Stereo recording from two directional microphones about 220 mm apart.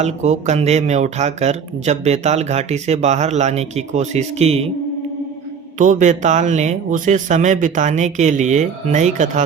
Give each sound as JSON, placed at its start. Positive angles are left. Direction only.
{"t": 0.0, "sound": "speech", "side_deg": -30}
{"t": 5.8, "sound": "speech", "side_deg": -35}